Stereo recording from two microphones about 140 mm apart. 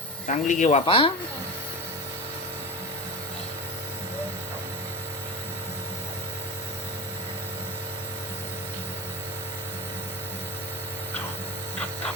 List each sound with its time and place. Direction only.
0.3 s speech: 60° left (ahead or behind)
0.9 s speech: 40° left (ahead or behind)